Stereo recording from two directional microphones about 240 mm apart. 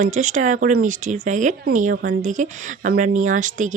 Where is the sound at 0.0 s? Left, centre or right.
Right.